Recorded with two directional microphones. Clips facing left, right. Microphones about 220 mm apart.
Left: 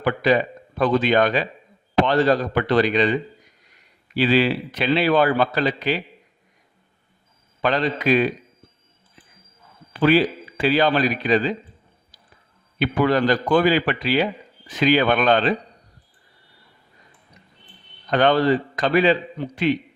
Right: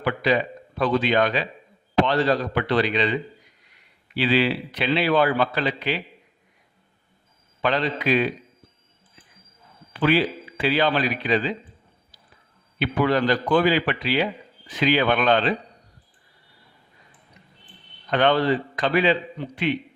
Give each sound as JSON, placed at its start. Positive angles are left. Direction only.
{"t": 0.0, "sound": "speech", "side_deg": 45}
{"t": 7.6, "sound": "speech", "side_deg": 45}
{"t": 9.9, "sound": "speech", "side_deg": 40}
{"t": 12.8, "sound": "speech", "side_deg": 45}
{"t": 18.1, "sound": "a man's voice", "side_deg": 40}